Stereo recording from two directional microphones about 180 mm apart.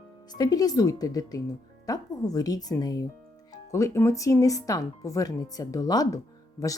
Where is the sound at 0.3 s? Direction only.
20° left (ahead or behind).